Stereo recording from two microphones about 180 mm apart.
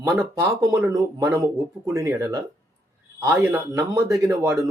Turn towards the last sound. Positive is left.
turn(degrees=-20)  # may be behind; listen again after turning